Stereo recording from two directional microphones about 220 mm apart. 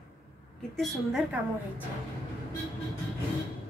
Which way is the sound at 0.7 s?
Centre (ahead or behind).